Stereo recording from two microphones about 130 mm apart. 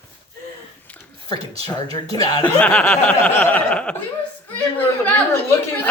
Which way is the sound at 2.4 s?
10° left (ahead or behind).